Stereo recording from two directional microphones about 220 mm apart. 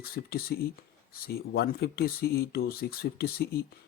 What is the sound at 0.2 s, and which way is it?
Speech, 45° left (ahead or behind).